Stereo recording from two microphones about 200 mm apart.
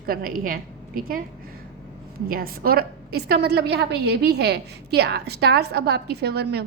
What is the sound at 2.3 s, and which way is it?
A woman's voice, 50° right (ahead or behind).